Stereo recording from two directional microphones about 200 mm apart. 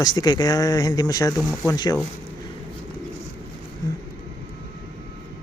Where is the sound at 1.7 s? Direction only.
20° left (ahead or behind).